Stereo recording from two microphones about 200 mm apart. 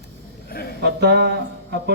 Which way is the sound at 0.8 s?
55° right (ahead or behind).